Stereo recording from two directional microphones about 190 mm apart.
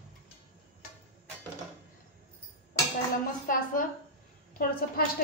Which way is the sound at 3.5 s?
45° left (ahead or behind).